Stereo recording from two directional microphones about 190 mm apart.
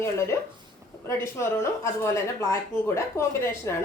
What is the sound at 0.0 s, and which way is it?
A woman's voice, 15° left (ahead or behind).